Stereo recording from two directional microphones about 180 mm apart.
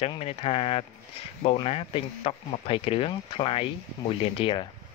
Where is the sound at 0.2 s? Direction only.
35° left (ahead or behind).